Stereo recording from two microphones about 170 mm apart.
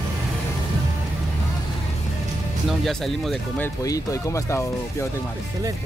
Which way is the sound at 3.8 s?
20° left (ahead or behind).